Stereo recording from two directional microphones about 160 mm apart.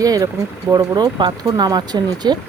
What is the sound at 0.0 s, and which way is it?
Speech, 20° right (ahead or behind).